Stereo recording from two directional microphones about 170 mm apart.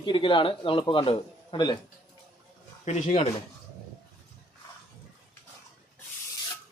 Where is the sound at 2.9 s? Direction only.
40° left (ahead or behind).